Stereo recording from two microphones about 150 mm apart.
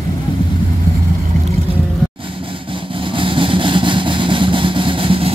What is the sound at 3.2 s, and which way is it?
Vehicle, 35° right (ahead or behind).